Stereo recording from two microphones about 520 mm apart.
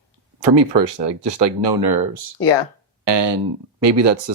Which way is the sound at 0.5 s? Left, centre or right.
Right.